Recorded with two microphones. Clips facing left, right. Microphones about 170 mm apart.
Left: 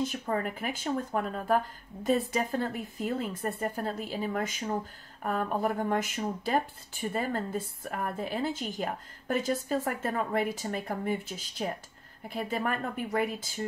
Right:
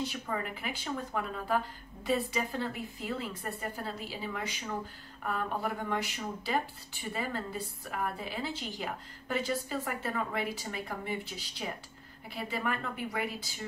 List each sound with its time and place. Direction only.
0.0 s a woman's voice: 45° left (ahead or behind)